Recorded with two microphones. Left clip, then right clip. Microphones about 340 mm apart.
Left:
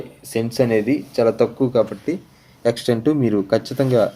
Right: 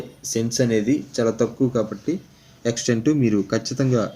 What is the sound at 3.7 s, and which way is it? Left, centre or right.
Speech, left.